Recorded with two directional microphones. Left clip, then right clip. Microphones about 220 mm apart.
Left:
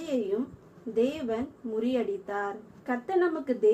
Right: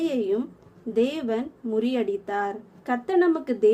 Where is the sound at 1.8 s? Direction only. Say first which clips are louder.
Right 3 dB; 50° right (ahead or behind).